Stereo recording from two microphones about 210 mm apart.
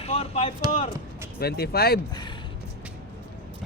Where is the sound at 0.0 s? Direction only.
30° left (ahead or behind).